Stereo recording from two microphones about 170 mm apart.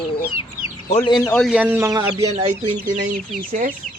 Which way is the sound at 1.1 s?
20° left (ahead or behind).